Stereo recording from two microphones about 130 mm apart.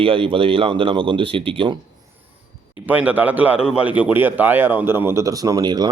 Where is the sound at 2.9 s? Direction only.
10° right (ahead or behind).